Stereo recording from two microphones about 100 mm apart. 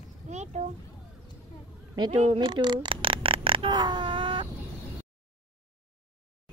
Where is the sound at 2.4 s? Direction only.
50° right (ahead or behind); by 3.7 s 65° right (ahead or behind).